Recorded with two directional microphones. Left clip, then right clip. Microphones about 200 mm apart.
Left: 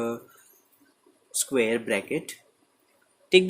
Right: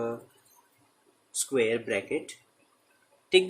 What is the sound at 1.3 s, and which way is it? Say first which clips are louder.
Speech: left 2 dB; 50° left (ahead or behind).